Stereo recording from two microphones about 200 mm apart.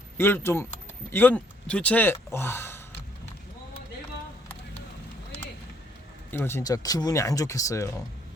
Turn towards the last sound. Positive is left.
turn(degrees=15)  # may be behind; listen again after turning